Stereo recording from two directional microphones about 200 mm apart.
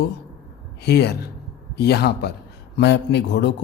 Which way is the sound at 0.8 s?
55° left (ahead or behind).